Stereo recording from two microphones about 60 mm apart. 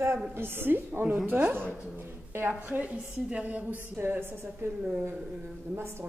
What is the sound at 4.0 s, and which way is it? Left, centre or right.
Speech, right.